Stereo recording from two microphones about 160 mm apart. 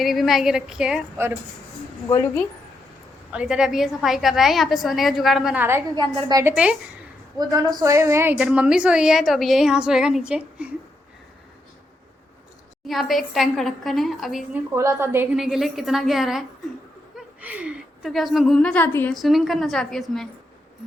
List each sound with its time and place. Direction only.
0.0 s a woman's voice: centre (ahead or behind)
3.3 s a woman's voice: 5° right (ahead or behind)
5.6 s a woman's voice: 15° right (ahead or behind)
6.1 s a woman's voice: 30° right (ahead or behind)
6.4 s a woman's voice: 5° right (ahead or behind)
7.3 s a woman's voice: 25° right (ahead or behind); by 10.7 s 5° right (ahead or behind)
12.9 s a woman's voice: centre (ahead or behind)
14.8 s a woman's voice: 15° right (ahead or behind)
15.4 s a woman's voice: centre (ahead or behind)
19.1 s a woman's voice: centre (ahead or behind)